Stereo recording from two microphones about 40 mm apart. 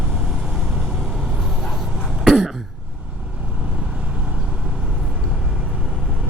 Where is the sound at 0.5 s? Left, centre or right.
Centre.